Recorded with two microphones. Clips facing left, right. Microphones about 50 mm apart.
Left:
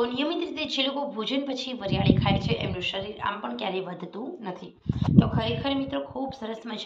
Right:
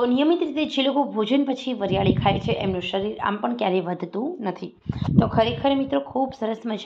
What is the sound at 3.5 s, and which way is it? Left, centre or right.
Speech, right.